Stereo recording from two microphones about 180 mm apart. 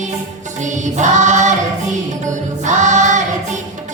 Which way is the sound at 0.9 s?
40° right (ahead or behind).